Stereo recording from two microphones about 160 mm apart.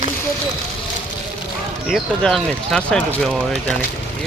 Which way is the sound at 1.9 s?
Centre (ahead or behind).